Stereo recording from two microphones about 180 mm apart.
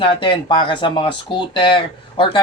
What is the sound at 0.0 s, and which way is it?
Speech, 30° left (ahead or behind).